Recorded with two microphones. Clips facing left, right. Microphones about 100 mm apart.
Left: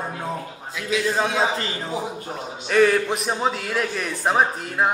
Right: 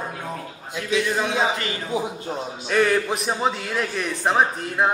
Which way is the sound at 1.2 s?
30° left (ahead or behind).